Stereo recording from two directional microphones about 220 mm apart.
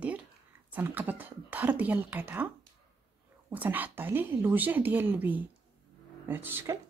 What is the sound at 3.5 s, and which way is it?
A woman's voice, 10° right (ahead or behind).